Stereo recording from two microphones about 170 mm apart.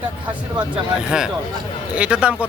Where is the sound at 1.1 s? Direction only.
5° right (ahead or behind).